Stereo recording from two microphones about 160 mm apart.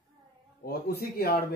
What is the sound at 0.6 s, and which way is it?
Speech, 70° left (ahead or behind).